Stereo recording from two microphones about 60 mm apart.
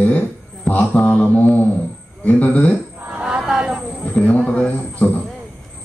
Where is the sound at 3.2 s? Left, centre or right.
Centre.